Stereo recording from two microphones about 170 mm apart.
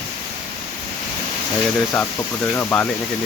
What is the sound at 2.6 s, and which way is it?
Speech, 10° left (ahead or behind).